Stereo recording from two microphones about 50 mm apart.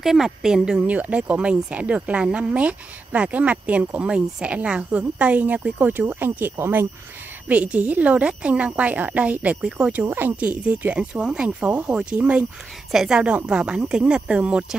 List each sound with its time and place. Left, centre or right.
0.0 s a woman's voice: centre
0.8 s speech: right
5.8 s speech: right
7.4 s speech: right
10.0 s speech: right
10.3 s speech: right
12.9 s a woman's voice: centre
13.5 s speech: centre